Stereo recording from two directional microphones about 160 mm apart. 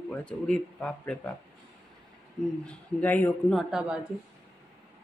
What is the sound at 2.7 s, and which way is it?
Speech, 10° left (ahead or behind).